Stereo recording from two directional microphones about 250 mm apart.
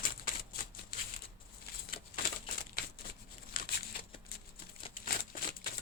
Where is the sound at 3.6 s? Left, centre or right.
Left.